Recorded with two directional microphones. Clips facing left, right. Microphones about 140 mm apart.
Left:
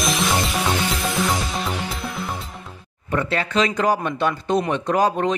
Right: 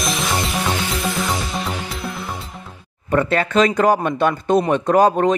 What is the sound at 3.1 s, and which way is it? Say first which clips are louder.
Speech: right 5 dB; 50° right (ahead or behind).